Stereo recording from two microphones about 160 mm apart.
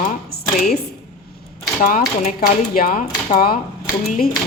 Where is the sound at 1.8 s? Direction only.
55° left (ahead or behind).